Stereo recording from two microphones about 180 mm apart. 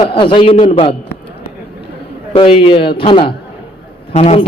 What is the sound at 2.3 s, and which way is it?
A man's voice, 30° left (ahead or behind).